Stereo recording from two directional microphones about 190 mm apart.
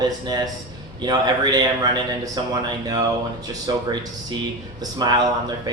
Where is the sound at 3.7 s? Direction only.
20° right (ahead or behind).